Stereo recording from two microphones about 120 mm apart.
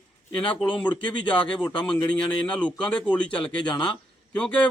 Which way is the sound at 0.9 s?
40° left (ahead or behind).